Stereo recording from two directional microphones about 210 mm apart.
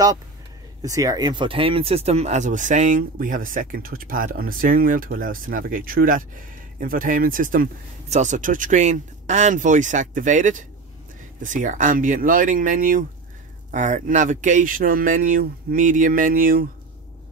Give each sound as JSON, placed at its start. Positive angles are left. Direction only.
{"t": 0.8, "sound": "speech", "side_deg": -15}